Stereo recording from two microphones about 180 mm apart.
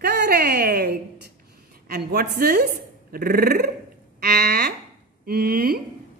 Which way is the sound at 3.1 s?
55° right (ahead or behind).